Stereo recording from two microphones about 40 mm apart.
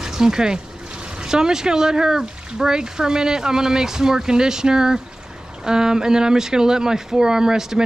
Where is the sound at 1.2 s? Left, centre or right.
Centre.